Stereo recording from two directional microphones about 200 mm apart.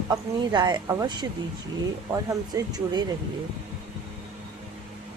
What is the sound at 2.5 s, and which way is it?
Speech, 20° right (ahead or behind).